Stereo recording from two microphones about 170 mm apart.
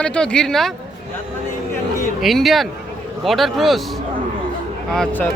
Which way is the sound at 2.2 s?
Centre (ahead or behind).